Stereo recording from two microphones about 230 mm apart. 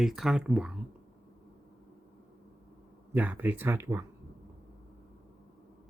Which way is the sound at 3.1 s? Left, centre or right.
Centre.